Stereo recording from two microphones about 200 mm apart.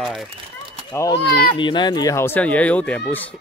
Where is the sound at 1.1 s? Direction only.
55° left (ahead or behind).